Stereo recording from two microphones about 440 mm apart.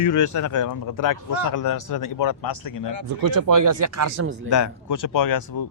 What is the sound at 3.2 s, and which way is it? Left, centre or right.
Speech, right.